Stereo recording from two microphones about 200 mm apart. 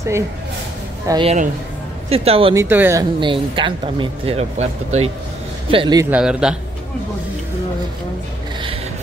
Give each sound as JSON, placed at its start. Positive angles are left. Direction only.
{"t": 1.0, "sound": "speech", "side_deg": -20}
{"t": 2.5, "sound": "speech", "side_deg": -10}
{"t": 6.0, "sound": "a man's voice", "side_deg": -5}